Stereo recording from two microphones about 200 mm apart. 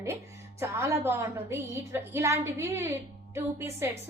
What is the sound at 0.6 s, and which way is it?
A woman's voice, 15° right (ahead or behind).